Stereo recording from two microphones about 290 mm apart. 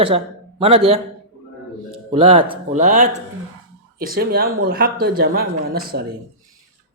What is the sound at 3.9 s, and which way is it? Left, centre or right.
Speech, right.